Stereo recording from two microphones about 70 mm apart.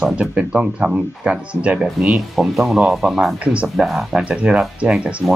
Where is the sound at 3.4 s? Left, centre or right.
Centre.